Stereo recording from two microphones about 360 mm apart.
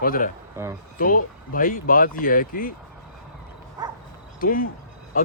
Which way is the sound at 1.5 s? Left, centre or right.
Left.